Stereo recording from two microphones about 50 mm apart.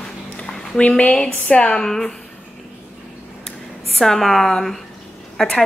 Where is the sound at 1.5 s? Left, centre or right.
Left.